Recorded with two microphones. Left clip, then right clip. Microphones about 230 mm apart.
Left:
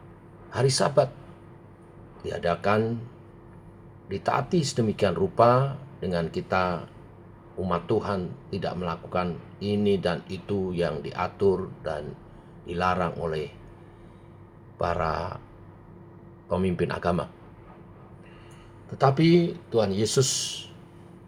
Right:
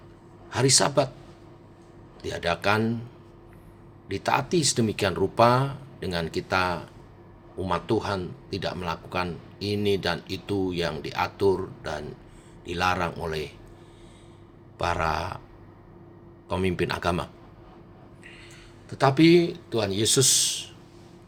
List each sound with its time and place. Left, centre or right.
0.5 s a man's voice: right
2.2 s a man's voice: right
4.1 s a man's voice: right
14.8 s a man's voice: right
16.5 s a man's voice: right
18.9 s a man's voice: right